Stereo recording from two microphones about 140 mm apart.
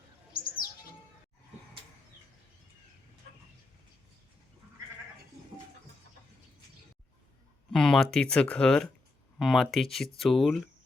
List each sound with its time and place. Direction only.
0.3 s bird: 90° left
7.7 s speech: 5° left (ahead or behind)